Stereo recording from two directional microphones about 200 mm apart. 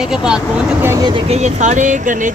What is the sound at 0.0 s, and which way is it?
Speech, 5° right (ahead or behind).